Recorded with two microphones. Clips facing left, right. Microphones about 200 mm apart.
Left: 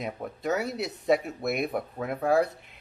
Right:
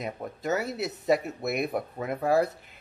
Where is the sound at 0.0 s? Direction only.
Centre (ahead or behind).